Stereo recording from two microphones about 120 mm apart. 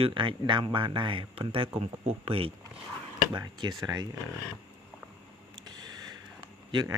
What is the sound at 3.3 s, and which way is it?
Speech, 40° right (ahead or behind).